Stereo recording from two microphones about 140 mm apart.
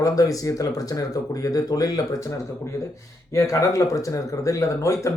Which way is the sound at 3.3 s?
20° left (ahead or behind).